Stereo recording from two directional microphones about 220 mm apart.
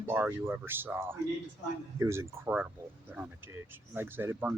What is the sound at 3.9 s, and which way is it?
Speech, 10° right (ahead or behind).